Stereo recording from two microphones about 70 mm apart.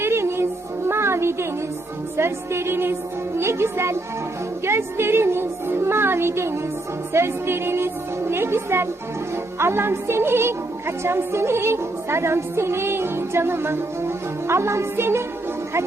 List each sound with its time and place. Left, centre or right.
0.0 s music: right
2.1 s a woman's voice: right